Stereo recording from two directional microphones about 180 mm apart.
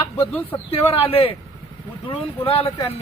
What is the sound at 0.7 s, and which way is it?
Speech, 30° left (ahead or behind).